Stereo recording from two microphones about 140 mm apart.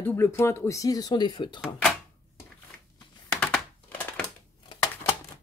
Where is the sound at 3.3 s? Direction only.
5° left (ahead or behind).